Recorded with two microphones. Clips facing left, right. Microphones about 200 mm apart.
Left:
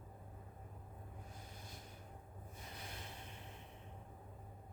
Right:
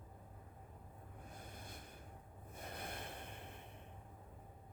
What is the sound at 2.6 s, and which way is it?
Snort, 55° right (ahead or behind).